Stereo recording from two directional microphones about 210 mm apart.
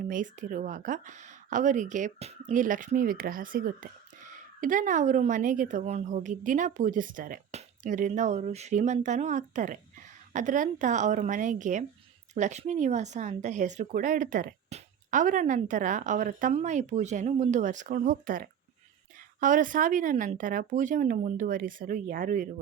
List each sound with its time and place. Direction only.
0.0 s speech: 40° right (ahead or behind)